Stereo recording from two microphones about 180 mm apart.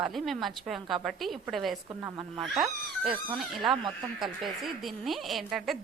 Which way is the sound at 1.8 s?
20° right (ahead or behind).